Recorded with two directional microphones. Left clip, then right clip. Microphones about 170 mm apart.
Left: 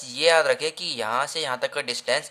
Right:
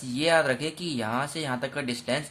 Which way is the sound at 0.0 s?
35° left (ahead or behind).